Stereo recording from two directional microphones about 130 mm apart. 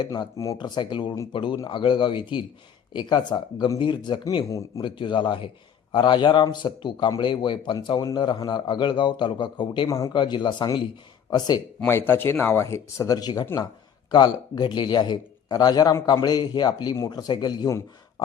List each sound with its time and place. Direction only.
0.0 s a man's voice: 30° left (ahead or behind)
4.4 s speech: 25° left (ahead or behind)
4.8 s a man's voice: 40° left (ahead or behind)
11.9 s a man's voice: 15° left (ahead or behind)